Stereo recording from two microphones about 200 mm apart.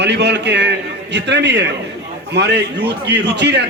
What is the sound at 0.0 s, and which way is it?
A man's voice, 60° right (ahead or behind).